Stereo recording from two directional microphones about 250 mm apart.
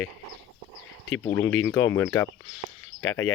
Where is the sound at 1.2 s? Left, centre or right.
Centre.